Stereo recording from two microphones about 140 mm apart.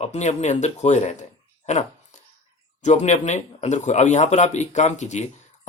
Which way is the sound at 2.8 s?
55° left (ahead or behind).